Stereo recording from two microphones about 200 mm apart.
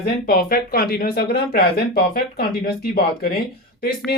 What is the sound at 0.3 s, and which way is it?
Speech, 50° left (ahead or behind).